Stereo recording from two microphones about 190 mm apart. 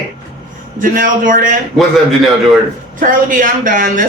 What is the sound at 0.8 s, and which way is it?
Speech, 45° right (ahead or behind).